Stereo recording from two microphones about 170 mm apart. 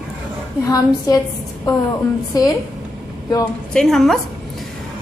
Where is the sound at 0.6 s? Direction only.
20° left (ahead or behind).